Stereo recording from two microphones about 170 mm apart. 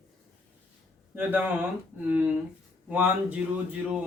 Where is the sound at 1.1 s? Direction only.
10° right (ahead or behind).